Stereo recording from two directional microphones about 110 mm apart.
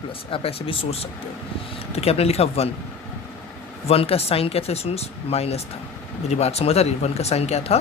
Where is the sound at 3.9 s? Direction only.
60° left (ahead or behind).